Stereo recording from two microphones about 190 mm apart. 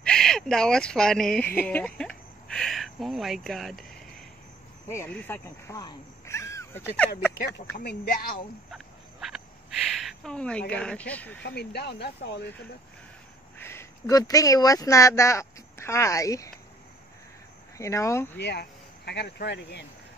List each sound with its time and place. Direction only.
0.0 s speech: 5° left (ahead or behind)
4.8 s speech: 10° left (ahead or behind)
7.6 s speech: 30° left (ahead or behind)
8.0 s speech: 50° left (ahead or behind)
8.7 s a sound: centre (ahead or behind)
10.7 s speech: 5° left (ahead or behind)
11.4 s speech: 60° left (ahead or behind)
13.6 s speech: 15° left (ahead or behind)
17.7 s speech: 15° left (ahead or behind)
18.4 s speech: 60° left (ahead or behind)